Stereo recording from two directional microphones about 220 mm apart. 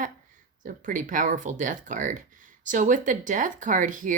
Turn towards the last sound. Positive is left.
turn(degrees=-35)  # may be behind; listen again after turning